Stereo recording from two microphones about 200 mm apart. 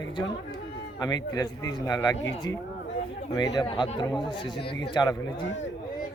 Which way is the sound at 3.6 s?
25° left (ahead or behind).